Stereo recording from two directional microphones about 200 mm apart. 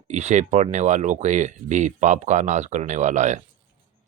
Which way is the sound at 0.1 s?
35° right (ahead or behind).